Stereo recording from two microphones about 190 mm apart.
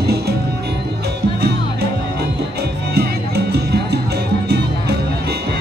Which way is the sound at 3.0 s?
60° right (ahead or behind).